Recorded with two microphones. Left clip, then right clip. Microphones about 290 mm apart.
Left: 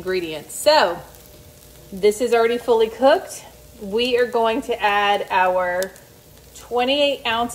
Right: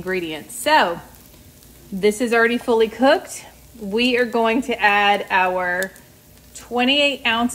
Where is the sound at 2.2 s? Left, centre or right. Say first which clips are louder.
Even; right.